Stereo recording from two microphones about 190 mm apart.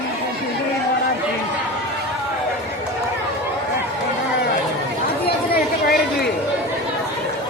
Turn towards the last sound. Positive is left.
turn(degrees=55)  # may be behind; listen again after turning